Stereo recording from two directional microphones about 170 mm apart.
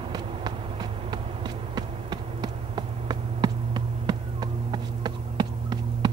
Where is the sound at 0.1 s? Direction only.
25° right (ahead or behind).